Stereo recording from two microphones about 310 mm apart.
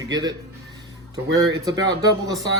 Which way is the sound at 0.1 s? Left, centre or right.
Centre.